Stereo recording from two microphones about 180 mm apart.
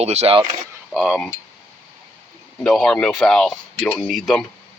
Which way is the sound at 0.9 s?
Centre (ahead or behind).